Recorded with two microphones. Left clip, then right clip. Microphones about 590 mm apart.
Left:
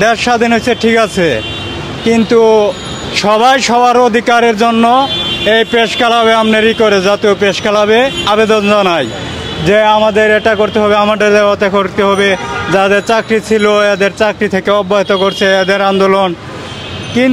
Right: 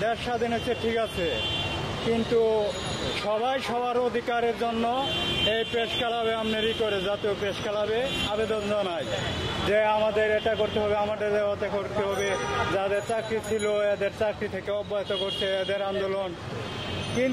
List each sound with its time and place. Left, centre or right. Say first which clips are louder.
0.0 s a man's voice: left 17 dB; left
2.3 s a man's voice: left 17 dB; left